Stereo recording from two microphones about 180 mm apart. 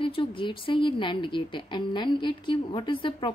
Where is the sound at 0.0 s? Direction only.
30° left (ahead or behind).